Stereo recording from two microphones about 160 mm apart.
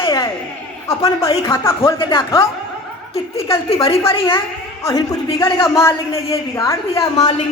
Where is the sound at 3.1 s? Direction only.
40° left (ahead or behind).